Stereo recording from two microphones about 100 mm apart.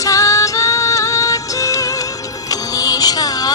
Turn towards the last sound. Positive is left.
turn(degrees=40)  # may be behind; listen again after turning